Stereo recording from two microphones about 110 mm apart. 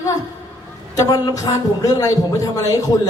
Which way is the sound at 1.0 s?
30° left (ahead or behind).